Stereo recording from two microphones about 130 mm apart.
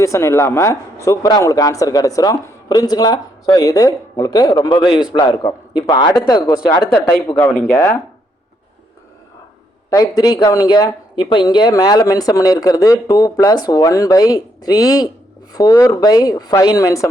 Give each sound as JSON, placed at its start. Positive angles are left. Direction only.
{"t": 0.0, "sound": "speech", "side_deg": 20}
{"t": 7.3, "sound": "speech", "side_deg": 15}
{"t": 9.9, "sound": "speech", "side_deg": 30}